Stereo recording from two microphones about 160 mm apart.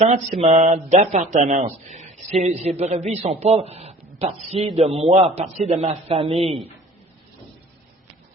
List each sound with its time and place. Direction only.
0.0 s a man's voice: 45° right (ahead or behind)